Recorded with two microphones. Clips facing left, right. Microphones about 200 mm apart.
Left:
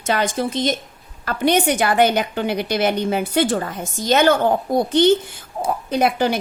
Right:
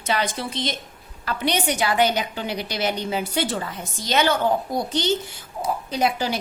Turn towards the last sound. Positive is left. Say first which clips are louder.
# left 5 dB
turn(degrees=55)  # may be behind; listen again after turning